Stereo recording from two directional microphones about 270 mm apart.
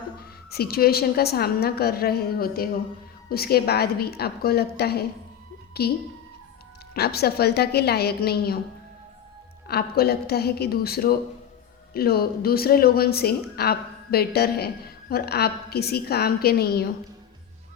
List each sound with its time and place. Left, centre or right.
0.2 s a woman's voice: left
6.9 s a woman's voice: left
9.6 s a woman's voice: left